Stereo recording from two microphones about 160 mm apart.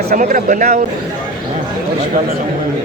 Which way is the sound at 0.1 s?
55° right (ahead or behind).